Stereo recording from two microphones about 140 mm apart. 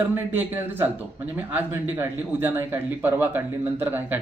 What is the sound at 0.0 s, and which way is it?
A man's voice, 15° right (ahead or behind).